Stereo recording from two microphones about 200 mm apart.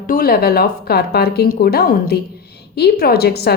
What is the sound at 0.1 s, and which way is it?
A woman's voice, 50° left (ahead or behind).